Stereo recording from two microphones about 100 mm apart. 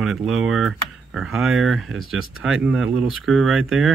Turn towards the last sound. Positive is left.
turn(degrees=-5)  # may be behind; listen again after turning